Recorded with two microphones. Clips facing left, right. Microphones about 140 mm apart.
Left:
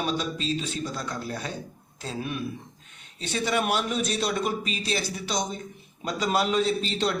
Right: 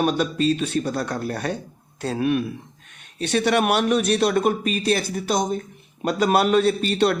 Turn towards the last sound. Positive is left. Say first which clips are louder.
# right 6 dB
turn(degrees=-60)  # may be behind; listen again after turning